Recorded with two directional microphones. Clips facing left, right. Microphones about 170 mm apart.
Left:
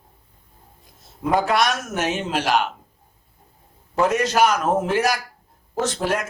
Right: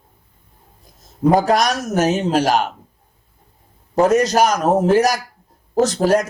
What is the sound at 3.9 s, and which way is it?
A man's voice, 40° right (ahead or behind).